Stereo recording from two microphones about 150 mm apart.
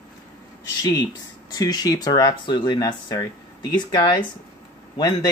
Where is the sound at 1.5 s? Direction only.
25° left (ahead or behind).